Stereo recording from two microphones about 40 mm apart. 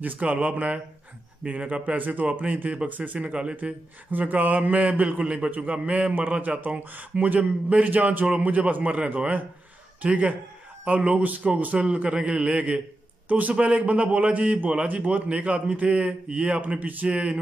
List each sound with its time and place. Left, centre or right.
0.0 s a man's voice: right
2.0 s speech: right
3.0 s a man's voice: right
4.1 s a man's voice: right
5.2 s a man's voice: right
6.4 s a man's voice: right
11.0 s a man's voice: right
11.2 s a man's voice: right
11.8 s a man's voice: right
13.3 s speech: right
13.6 s a man's voice: right